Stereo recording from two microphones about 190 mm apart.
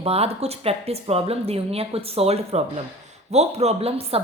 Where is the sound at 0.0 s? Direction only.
35° right (ahead or behind).